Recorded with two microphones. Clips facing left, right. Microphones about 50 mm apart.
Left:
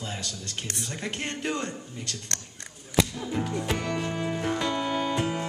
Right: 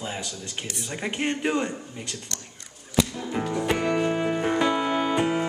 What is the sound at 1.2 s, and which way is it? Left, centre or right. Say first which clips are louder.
Speech: right 7 dB; centre.